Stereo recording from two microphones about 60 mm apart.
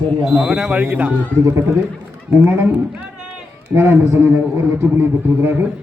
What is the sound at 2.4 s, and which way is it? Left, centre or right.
Speech, right.